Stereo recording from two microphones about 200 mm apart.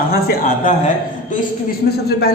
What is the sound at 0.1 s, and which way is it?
Speech, 45° left (ahead or behind).